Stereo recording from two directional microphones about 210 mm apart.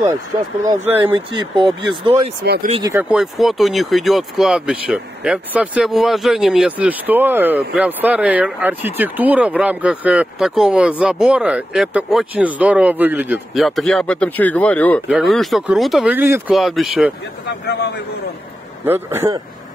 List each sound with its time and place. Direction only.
1.0 s speech: 20° right (ahead or behind)
2.4 s speech: 50° right (ahead or behind)
2.8 s speech: 10° right (ahead or behind)
17.5 s a man's voice: 50° left (ahead or behind)
18.9 s speech: 10° right (ahead or behind)